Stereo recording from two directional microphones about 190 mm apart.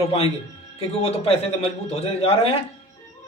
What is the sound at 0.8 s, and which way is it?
A man's voice, 30° left (ahead or behind).